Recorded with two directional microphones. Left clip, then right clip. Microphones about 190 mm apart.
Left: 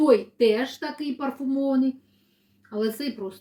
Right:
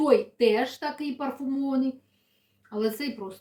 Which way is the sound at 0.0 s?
15° right (ahead or behind).